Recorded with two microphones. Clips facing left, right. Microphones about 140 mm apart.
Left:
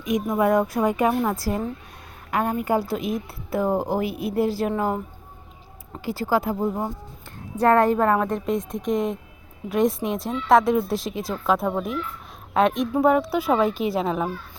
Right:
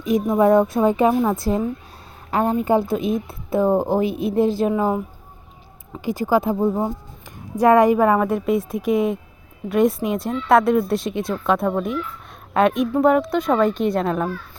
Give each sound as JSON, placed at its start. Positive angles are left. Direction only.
{"t": 0.0, "sound": "a woman's voice", "side_deg": -30}
{"t": 6.0, "sound": "a woman's voice", "side_deg": -20}